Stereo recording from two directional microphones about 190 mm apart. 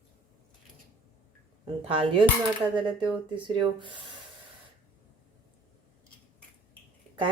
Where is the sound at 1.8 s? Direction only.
30° right (ahead or behind).